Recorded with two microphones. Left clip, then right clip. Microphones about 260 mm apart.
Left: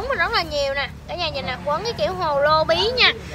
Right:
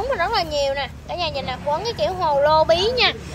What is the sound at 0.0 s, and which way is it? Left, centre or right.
Speech, centre.